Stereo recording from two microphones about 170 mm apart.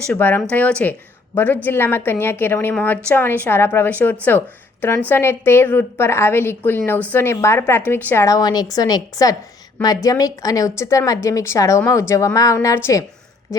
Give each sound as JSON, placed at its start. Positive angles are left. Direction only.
{"t": 0.1, "sound": "a woman's voice", "side_deg": 10}